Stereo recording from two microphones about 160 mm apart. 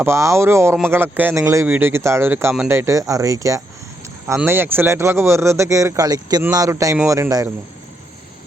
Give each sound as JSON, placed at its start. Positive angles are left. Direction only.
{"t": 0.0, "sound": "speech", "side_deg": -15}